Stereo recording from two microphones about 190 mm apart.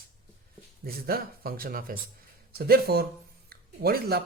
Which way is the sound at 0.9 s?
50° right (ahead or behind).